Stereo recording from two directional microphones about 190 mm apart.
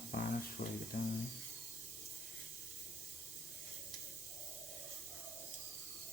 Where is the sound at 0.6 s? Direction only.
35° left (ahead or behind).